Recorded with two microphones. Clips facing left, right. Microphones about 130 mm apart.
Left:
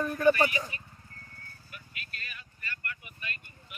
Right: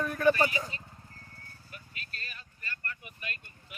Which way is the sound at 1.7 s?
35° right (ahead or behind).